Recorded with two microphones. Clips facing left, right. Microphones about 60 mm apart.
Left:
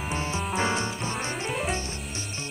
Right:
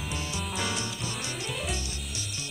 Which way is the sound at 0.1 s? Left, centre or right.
Left.